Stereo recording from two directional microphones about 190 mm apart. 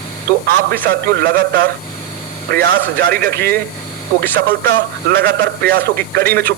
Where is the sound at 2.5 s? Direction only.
55° right (ahead or behind).